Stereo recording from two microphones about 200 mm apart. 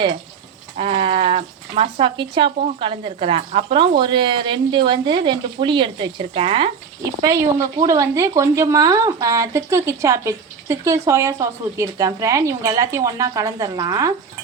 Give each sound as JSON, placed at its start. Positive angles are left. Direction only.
{"t": 0.8, "sound": "speech", "side_deg": -30}
{"t": 7.0, "sound": "speech", "side_deg": -15}